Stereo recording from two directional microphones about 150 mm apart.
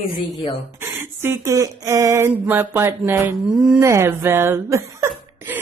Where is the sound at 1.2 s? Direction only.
20° right (ahead or behind).